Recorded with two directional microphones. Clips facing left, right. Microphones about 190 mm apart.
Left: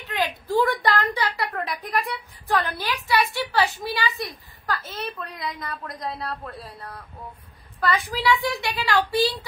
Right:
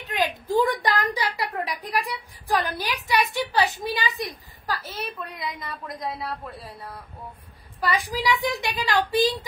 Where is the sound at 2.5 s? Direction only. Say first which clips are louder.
Even; 15° right (ahead or behind).